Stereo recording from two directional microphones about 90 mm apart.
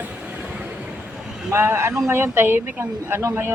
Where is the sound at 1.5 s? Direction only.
25° right (ahead or behind).